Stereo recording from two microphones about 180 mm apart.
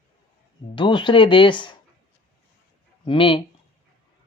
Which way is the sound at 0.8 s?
25° left (ahead or behind).